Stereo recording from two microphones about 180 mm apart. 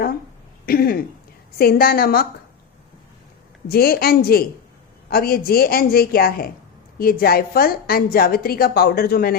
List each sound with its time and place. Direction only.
0.6 s a woman's voice: 55° left (ahead or behind)
3.7 s a woman's voice: 60° left (ahead or behind)